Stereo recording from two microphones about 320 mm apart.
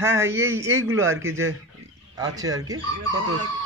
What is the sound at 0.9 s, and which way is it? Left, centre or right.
Speech, right.